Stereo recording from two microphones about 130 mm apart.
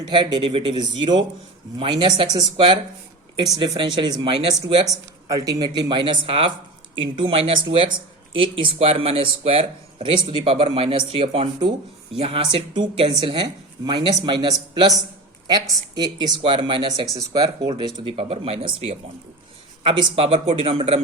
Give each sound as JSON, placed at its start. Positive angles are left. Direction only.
{"t": 0.0, "sound": "speech", "side_deg": -35}
{"t": 17.2, "sound": "speech", "side_deg": -25}
{"t": 18.2, "sound": "speech", "side_deg": -50}